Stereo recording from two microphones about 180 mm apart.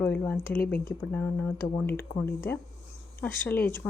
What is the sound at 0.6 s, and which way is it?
Speech, 55° left (ahead or behind).